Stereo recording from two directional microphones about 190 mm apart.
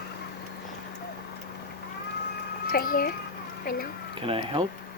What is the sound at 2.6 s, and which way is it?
Speech, 50° left (ahead or behind).